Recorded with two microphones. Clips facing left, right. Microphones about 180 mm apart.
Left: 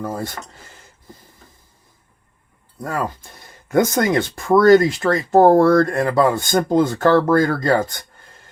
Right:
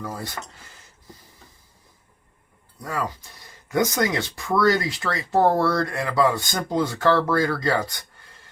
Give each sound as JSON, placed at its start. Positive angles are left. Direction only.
{"t": 0.0, "sound": "speech", "side_deg": 50}
{"t": 2.8, "sound": "speech", "side_deg": 50}